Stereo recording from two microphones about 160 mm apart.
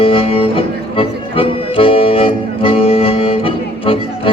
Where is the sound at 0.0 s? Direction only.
35° left (ahead or behind).